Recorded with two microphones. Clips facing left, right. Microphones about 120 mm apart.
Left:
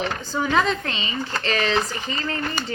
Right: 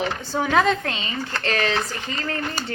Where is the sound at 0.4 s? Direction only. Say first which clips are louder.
Right 2 dB; 45° right (ahead or behind).